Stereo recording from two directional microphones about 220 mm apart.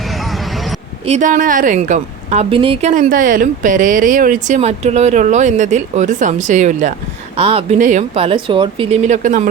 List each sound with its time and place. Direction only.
1.0 s a woman's voice: 30° right (ahead or behind)